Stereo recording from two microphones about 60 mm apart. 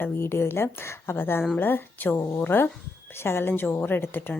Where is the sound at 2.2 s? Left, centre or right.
Left.